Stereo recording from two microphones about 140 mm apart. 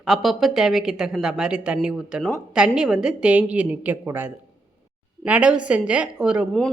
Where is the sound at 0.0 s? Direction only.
Centre (ahead or behind).